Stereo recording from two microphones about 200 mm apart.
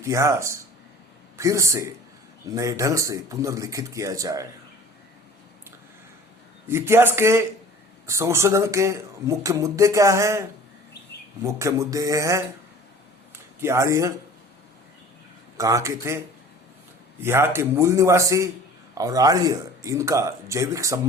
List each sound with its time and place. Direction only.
0.0 s speech: 15° right (ahead or behind)
6.7 s speech: 10° right (ahead or behind)
11.4 s speech: 15° right (ahead or behind)
15.5 s speech: 15° right (ahead or behind)